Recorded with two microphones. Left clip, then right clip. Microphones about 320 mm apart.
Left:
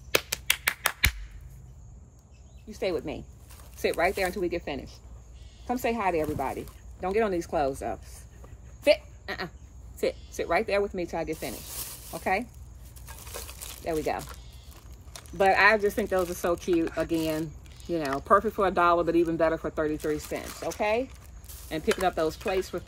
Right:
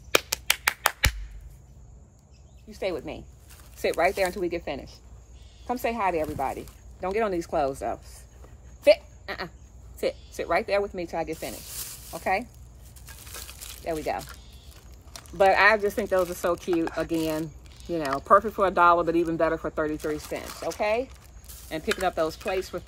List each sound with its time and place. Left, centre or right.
0.1 s finger snapping: centre
2.7 s speech: centre
8.8 s a sound: centre
9.9 s speech: centre
11.5 s snake: centre
12.2 s speech: centre
13.0 s a sound: centre
13.8 s speech: centre